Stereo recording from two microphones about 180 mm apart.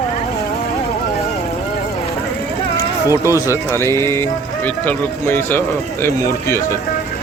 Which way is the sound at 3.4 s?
15° left (ahead or behind).